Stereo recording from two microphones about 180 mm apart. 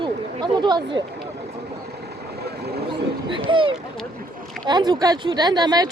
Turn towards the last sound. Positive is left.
turn(degrees=-20)  # may be behind; listen again after turning